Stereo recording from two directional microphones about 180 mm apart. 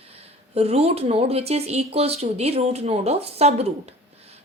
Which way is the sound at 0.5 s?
35° right (ahead or behind).